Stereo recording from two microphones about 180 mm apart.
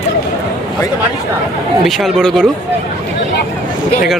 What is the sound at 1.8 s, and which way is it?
Speech, centre (ahead or behind).